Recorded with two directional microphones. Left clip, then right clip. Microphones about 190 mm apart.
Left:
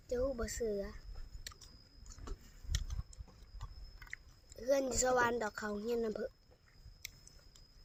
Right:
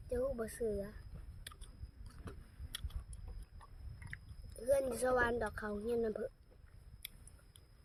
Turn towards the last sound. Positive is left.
turn(degrees=40)  # may be behind; listen again after turning